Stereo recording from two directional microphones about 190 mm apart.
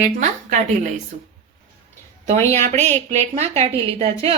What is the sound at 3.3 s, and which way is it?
Speech, 35° right (ahead or behind).